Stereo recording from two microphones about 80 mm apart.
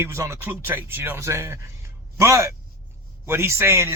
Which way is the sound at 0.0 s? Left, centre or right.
Right.